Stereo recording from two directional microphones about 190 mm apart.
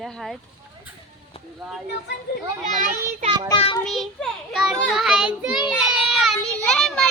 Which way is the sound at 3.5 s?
25° left (ahead or behind).